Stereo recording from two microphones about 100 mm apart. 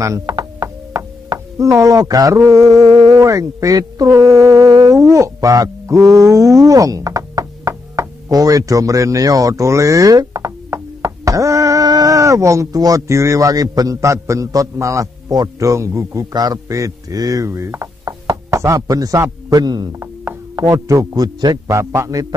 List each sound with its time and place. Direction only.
0.0 s a man's voice: 30° right (ahead or behind)
21.6 s a man's voice: 30° right (ahead or behind)